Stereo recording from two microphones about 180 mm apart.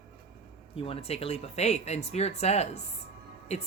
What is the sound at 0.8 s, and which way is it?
Speech, 30° left (ahead or behind).